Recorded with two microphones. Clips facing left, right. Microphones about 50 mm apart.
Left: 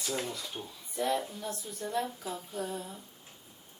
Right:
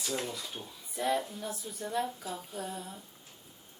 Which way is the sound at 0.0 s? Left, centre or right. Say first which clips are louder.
Even; centre.